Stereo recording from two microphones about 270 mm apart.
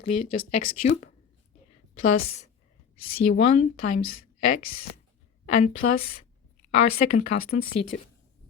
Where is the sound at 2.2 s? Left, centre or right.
Left.